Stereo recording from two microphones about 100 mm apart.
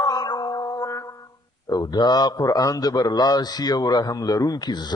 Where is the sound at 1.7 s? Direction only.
45° left (ahead or behind).